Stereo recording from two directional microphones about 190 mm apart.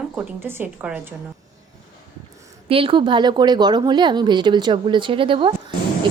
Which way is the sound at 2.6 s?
30° right (ahead or behind).